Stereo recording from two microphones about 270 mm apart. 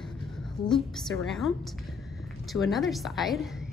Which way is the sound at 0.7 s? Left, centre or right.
Centre.